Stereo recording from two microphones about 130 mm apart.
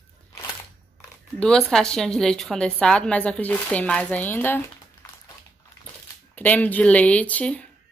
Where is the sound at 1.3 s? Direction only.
5° left (ahead or behind).